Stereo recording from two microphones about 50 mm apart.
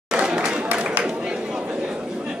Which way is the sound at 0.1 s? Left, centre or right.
Centre.